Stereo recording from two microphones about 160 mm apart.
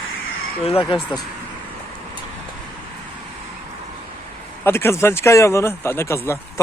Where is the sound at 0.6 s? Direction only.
35° left (ahead or behind).